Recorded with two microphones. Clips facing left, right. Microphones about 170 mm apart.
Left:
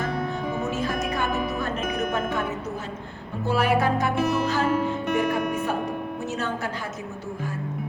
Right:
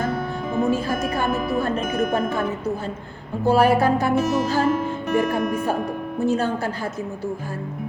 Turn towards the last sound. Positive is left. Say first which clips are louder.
# right 7 dB
turn(degrees=-30)  # may be behind; listen again after turning